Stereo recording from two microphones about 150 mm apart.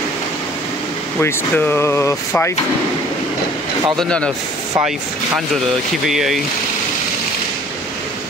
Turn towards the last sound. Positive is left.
turn(degrees=0)  # may be behind; listen again after turning